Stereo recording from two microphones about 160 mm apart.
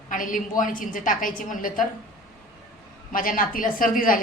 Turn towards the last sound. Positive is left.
turn(degrees=60)  # may be behind; listen again after turning